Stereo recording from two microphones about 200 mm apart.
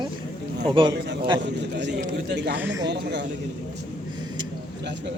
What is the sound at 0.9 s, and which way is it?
Speech, 60° right (ahead or behind).